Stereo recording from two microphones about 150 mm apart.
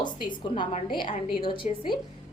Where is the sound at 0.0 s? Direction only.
30° left (ahead or behind).